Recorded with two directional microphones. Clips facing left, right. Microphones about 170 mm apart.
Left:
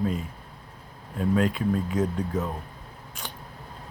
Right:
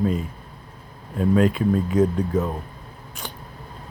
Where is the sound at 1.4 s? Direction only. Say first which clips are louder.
Right 5 dB; 80° right.